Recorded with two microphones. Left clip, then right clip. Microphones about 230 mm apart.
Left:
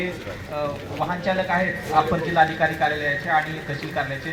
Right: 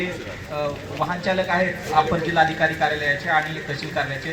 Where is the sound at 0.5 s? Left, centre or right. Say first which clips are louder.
Right 1 dB; right.